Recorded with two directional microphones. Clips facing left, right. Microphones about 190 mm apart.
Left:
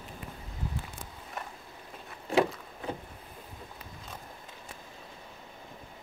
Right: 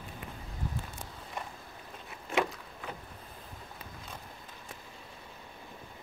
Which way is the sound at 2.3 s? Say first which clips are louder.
Left 5 dB; 30° left (ahead or behind).